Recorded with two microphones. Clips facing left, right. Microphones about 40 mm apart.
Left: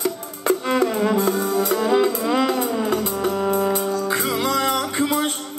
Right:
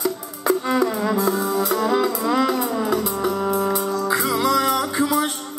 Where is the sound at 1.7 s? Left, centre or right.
Centre.